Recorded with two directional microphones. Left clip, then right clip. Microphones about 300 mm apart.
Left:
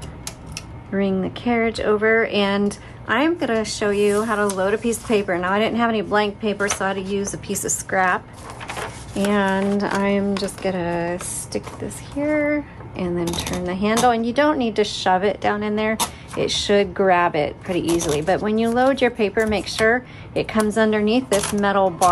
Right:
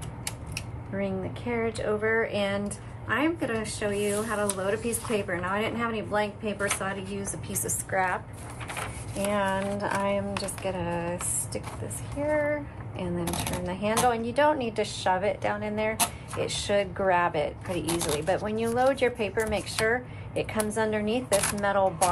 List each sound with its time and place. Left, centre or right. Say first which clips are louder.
0.9 s speech: left 9 dB; left
9.3 s speech: left 7 dB; left